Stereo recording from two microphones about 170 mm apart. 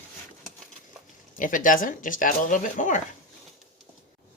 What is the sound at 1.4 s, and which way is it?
Speech, 50° left (ahead or behind).